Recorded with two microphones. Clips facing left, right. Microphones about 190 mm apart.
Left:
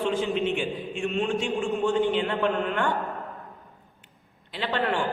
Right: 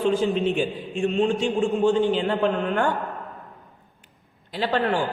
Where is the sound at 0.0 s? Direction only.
35° right (ahead or behind).